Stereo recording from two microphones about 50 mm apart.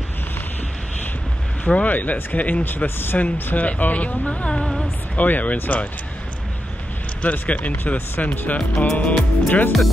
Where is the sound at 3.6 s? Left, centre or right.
Left.